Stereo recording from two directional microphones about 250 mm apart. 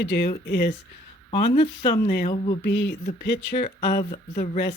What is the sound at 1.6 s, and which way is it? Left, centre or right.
Speech, centre.